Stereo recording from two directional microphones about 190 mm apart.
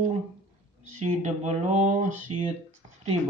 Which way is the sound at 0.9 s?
40° right (ahead or behind).